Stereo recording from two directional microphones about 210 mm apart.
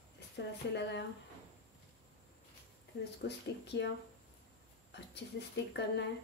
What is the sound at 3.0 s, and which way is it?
Speech, 55° left (ahead or behind).